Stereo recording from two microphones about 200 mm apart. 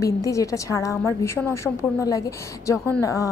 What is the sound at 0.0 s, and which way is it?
A woman's voice, 15° left (ahead or behind).